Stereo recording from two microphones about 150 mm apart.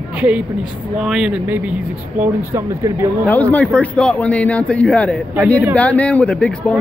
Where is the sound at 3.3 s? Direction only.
10° left (ahead or behind).